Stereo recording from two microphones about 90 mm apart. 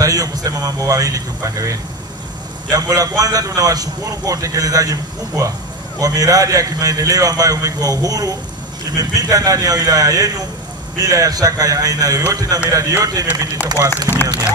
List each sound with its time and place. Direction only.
0.0 s a man's voice: 40° right (ahead or behind)